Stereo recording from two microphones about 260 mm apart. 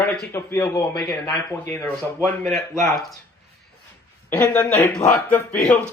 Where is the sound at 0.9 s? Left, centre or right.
Centre.